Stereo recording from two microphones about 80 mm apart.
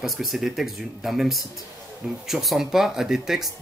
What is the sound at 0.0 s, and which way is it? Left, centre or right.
Speech, centre.